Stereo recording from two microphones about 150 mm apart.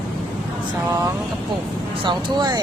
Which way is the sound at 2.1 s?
30° right (ahead or behind).